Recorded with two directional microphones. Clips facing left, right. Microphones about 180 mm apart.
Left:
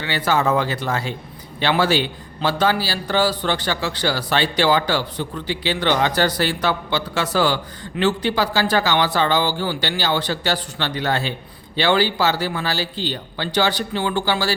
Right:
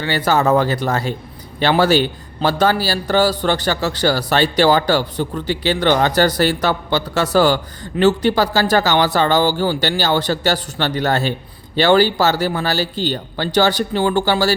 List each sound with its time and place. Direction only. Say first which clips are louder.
0.0 s a man's voice: right 3 dB; 40° right (ahead or behind)